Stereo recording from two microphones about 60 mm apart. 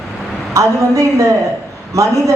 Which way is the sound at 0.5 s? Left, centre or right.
Right.